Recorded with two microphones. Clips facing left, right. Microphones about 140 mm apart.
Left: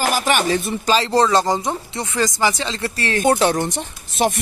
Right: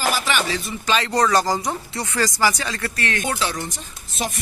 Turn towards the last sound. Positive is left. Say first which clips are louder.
# left 9 dB
turn(degrees=65)  # may be behind; listen again after turning